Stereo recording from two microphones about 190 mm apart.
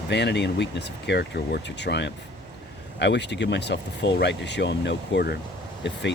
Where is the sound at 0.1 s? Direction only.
65° left (ahead or behind).